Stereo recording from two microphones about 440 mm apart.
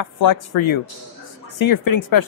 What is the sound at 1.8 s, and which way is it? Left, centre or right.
Speech, left.